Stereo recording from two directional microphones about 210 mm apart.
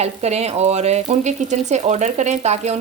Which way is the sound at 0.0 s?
30° right (ahead or behind).